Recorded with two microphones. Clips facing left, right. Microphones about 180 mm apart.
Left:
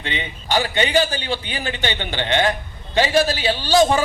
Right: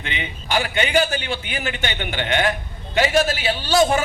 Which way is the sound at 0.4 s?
35° left (ahead or behind).